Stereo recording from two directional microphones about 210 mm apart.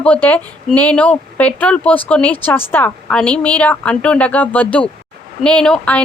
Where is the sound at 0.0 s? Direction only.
5° left (ahead or behind).